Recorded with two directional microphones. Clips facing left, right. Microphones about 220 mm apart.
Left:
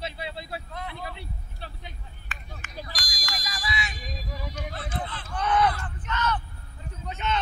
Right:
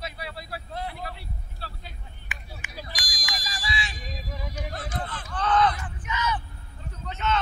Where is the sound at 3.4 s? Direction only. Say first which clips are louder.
Left 1 dB; 30° right (ahead or behind).